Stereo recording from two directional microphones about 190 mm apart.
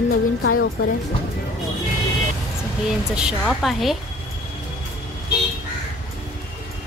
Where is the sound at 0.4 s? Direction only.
90° left.